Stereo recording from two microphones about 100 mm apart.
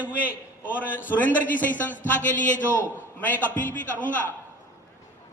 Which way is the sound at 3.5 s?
15° left (ahead or behind).